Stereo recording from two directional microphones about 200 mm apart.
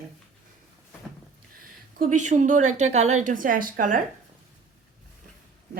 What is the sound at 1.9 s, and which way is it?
A woman's voice, 40° right (ahead or behind).